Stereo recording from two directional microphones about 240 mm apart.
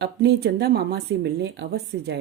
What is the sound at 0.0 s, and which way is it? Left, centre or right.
Speech, right.